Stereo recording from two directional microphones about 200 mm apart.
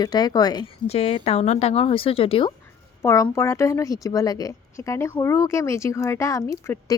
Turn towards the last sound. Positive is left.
turn(degrees=15)  # may be behind; listen again after turning